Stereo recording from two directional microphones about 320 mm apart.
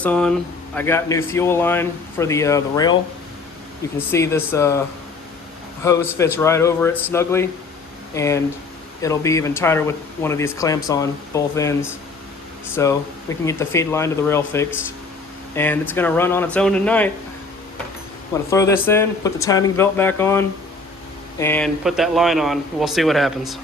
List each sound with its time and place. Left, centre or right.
0.0 s speech: centre
3.9 s speech: centre
5.8 s speech: centre
18.5 s speech: centre